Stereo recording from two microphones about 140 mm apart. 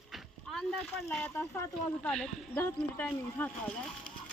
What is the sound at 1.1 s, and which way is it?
A woman's voice, 10° left (ahead or behind).